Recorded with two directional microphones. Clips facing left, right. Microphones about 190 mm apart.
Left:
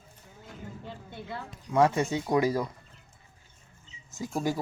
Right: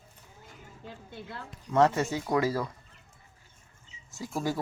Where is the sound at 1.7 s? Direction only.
10° left (ahead or behind).